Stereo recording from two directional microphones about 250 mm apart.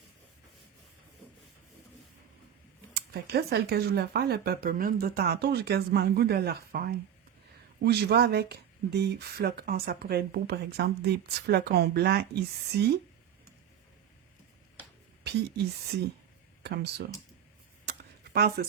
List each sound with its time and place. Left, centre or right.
2.9 s speech: right
15.2 s speech: right
16.6 s speech: right
18.3 s speech: right